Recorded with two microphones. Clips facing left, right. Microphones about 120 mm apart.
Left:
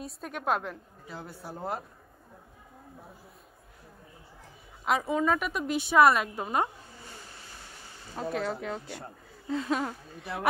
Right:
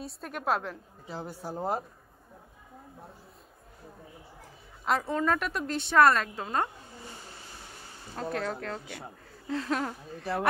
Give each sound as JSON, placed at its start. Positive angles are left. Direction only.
{"t": 0.0, "sound": "speech", "side_deg": 0}
{"t": 1.0, "sound": "speech", "side_deg": -25}
{"t": 4.8, "sound": "speech", "side_deg": 5}
{"t": 8.2, "sound": "speech", "side_deg": 0}